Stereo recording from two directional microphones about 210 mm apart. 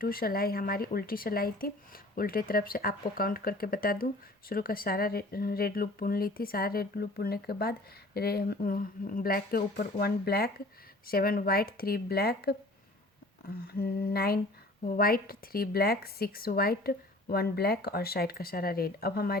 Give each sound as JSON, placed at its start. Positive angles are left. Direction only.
{"t": 0.0, "sound": "speech", "side_deg": 45}
{"t": 13.7, "sound": "speech", "side_deg": 45}